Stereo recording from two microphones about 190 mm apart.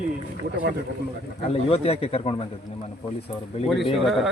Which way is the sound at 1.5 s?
30° left (ahead or behind).